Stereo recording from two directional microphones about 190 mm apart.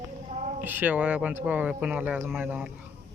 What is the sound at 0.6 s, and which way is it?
Speech, 10° right (ahead or behind).